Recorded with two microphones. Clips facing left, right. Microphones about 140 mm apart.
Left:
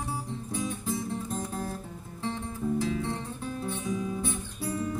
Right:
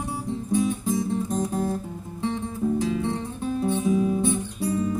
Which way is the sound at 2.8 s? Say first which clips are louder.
Right 5 dB; 20° right (ahead or behind).